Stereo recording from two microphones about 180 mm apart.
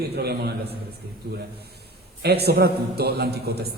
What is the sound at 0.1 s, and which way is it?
Speech, 65° right (ahead or behind).